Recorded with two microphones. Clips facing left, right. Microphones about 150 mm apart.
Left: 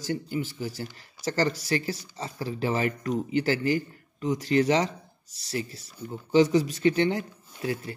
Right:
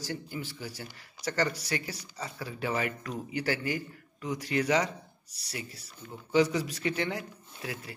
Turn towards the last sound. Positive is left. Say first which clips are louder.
# left 8 dB
turn(degrees=30)  # may be behind; listen again after turning